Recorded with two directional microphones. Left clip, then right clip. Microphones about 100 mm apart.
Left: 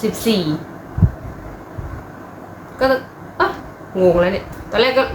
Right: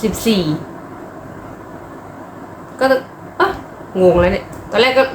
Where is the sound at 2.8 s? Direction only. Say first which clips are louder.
Right 2 dB; 15° right (ahead or behind).